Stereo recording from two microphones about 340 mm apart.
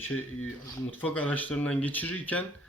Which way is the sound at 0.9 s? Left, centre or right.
Centre.